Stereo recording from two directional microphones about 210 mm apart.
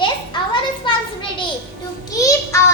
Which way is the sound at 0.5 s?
25° left (ahead or behind).